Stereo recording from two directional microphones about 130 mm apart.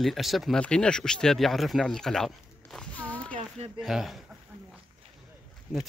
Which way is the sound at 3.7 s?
Centre (ahead or behind).